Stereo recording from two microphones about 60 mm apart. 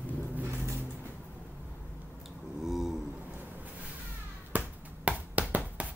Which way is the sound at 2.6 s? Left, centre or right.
Centre.